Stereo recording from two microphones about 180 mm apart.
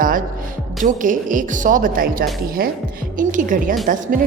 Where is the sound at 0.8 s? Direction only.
45° right (ahead or behind).